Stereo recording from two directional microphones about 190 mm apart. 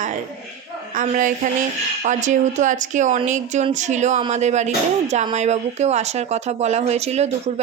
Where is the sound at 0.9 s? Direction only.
45° right (ahead or behind).